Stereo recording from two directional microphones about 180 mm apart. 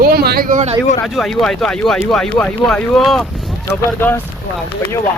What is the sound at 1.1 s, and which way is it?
Speech, centre (ahead or behind).